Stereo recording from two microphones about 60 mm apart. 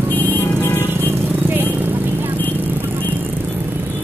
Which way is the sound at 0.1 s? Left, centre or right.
Left.